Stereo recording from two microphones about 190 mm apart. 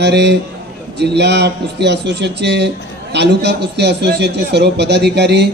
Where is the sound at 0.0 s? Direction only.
65° right (ahead or behind).